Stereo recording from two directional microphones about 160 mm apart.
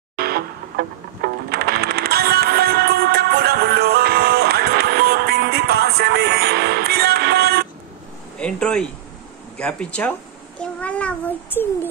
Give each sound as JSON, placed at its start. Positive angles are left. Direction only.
{"t": 0.2, "sound": "music", "side_deg": -75}
{"t": 8.4, "sound": "a child's voice", "side_deg": 5}